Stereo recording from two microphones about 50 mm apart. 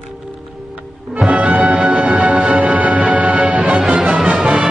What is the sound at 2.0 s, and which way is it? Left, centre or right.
Music, centre.